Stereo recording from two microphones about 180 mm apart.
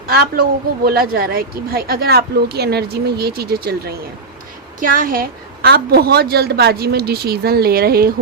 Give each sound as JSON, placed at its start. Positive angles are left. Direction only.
{"t": 0.1, "sound": "a woman's voice", "side_deg": -55}
{"t": 4.8, "sound": "a woman's voice", "side_deg": -50}